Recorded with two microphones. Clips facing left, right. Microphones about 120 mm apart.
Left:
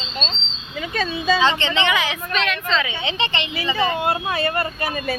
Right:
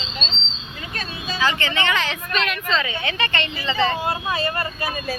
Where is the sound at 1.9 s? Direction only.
5° left (ahead or behind).